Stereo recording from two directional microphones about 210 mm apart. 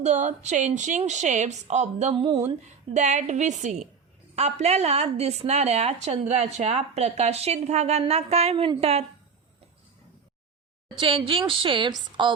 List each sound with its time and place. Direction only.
0.0 s a woman's voice: 35° right (ahead or behind)
2.9 s a woman's voice: 35° right (ahead or behind)
10.9 s a woman's voice: 25° right (ahead or behind)